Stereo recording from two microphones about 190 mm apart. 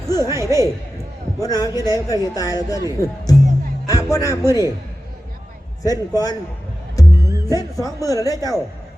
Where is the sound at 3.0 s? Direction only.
50° right (ahead or behind).